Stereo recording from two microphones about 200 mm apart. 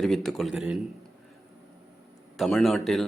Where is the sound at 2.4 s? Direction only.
Centre (ahead or behind).